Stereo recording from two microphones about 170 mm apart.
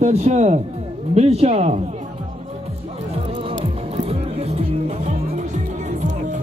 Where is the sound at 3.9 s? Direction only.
40° right (ahead or behind).